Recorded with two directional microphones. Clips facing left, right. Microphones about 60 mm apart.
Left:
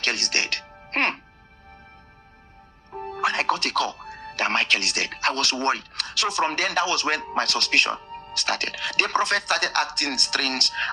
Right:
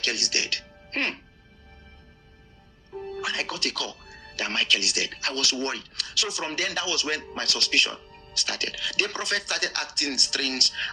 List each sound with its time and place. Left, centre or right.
0.0 s speech: left
2.9 s speech: left